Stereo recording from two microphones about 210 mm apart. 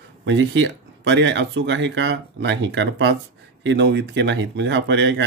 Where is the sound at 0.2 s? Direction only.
60° right (ahead or behind).